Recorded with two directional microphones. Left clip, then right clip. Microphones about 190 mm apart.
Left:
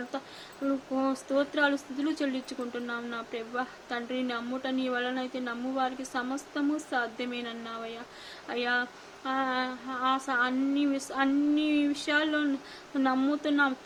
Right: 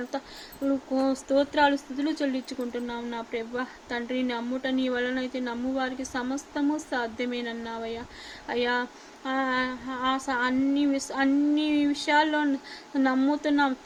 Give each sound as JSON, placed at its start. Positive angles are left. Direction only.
{"t": 1.0, "sound": "speech", "side_deg": -15}